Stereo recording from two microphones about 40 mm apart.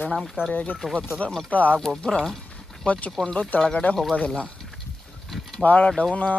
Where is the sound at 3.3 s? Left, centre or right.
Left.